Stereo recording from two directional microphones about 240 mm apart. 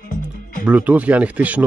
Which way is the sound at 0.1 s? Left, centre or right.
Left.